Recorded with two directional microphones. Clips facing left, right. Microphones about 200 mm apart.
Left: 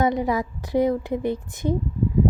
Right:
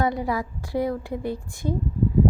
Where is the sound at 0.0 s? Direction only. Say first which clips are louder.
Left 3 dB; 20° left (ahead or behind).